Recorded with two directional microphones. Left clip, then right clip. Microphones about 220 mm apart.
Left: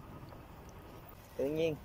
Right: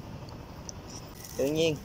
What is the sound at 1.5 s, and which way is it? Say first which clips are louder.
Speech: right 7 dB; 10° right (ahead or behind).